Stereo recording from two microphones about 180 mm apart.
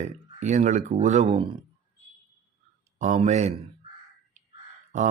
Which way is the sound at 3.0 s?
40° right (ahead or behind).